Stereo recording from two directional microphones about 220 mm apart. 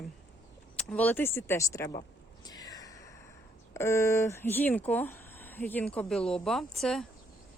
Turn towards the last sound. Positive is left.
turn(degrees=0)  # may be behind; listen again after turning